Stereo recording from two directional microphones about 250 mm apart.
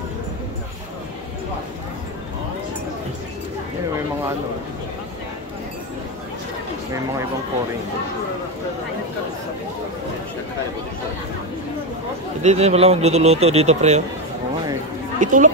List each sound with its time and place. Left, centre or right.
12.4 s speech: right
15.1 s speech: right